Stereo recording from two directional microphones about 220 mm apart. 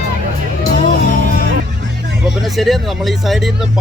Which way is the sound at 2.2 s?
Centre (ahead or behind).